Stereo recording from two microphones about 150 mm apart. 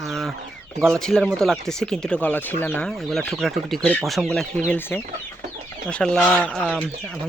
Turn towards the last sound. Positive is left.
turn(degrees=5)  # may be behind; listen again after turning